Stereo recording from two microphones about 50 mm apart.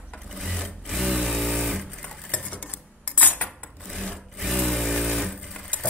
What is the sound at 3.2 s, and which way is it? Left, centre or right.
Cutlery, left.